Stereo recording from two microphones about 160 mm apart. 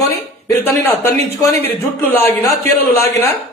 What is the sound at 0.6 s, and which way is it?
A man's voice, 15° left (ahead or behind).